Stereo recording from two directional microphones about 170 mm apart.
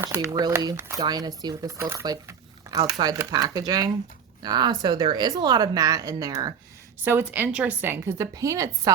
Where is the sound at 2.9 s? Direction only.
20° right (ahead or behind).